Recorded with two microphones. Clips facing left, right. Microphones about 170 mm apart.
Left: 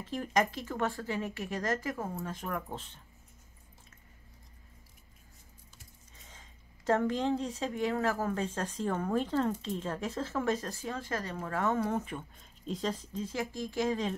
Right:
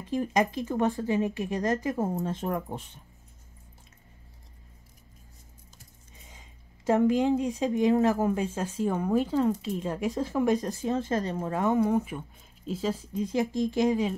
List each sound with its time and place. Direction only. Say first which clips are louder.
0.0 s a woman's voice: right 4 dB; 15° right (ahead or behind)
2.7 s a woman's voice: right 4 dB; 15° right (ahead or behind)
6.9 s a woman's voice: right 6 dB; 10° right (ahead or behind)